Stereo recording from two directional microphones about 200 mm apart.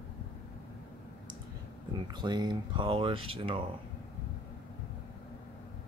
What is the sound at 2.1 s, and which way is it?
Speech, 20° right (ahead or behind).